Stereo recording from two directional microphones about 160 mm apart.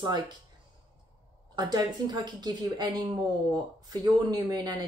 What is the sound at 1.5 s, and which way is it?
Speech, 25° right (ahead or behind).